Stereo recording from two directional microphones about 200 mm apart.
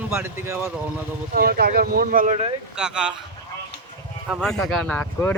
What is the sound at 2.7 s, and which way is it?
Speech, 5° right (ahead or behind).